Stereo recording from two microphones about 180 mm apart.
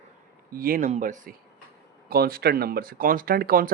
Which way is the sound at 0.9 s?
40° right (ahead or behind).